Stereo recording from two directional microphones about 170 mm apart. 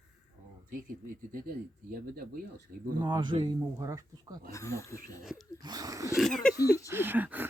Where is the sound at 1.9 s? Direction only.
60° right (ahead or behind).